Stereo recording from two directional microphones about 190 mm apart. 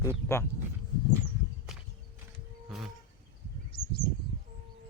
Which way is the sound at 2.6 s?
Centre (ahead or behind).